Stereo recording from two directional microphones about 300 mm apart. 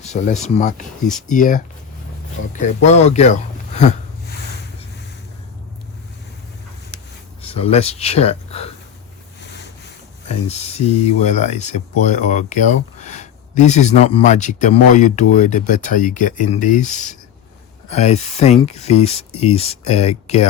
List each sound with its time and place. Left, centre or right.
0.0 s speech: left
7.4 s speech: centre
10.2 s speech: left